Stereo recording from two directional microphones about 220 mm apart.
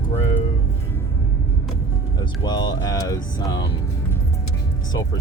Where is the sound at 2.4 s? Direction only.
20° left (ahead or behind).